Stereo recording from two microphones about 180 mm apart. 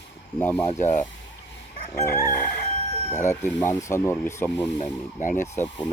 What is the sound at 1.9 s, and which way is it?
Speech, 15° left (ahead or behind).